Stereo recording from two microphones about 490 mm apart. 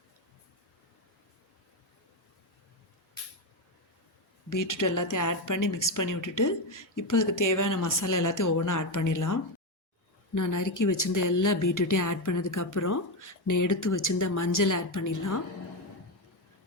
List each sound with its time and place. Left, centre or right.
4.4 s a woman's voice: left